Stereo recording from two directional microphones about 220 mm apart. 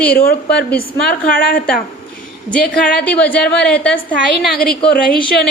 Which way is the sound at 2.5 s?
5° left (ahead or behind).